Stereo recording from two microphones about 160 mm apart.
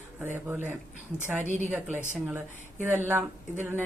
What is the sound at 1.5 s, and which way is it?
Speech, 50° right (ahead or behind).